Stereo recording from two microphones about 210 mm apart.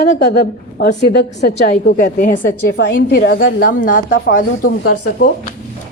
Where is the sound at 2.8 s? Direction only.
50° left (ahead or behind).